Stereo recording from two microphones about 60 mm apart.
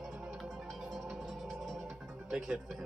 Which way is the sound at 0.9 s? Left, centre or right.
Centre.